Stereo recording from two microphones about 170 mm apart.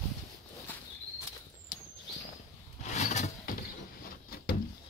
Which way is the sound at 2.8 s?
45° left (ahead or behind).